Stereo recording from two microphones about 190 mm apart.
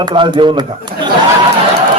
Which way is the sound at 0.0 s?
25° right (ahead or behind).